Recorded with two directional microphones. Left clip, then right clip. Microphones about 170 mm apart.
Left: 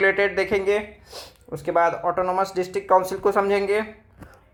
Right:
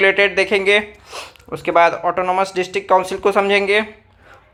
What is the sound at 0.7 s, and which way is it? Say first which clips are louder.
Speech: right 9 dB; 10° right (ahead or behind).